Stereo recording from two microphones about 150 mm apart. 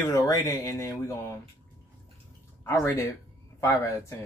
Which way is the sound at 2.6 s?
20° left (ahead or behind).